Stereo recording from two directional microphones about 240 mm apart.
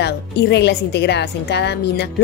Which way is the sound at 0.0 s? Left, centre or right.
Left.